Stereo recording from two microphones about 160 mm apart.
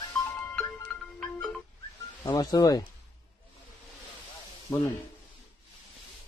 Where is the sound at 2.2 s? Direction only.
25° left (ahead or behind).